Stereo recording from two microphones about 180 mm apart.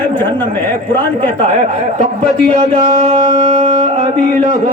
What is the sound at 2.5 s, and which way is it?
Speech, 30° right (ahead or behind).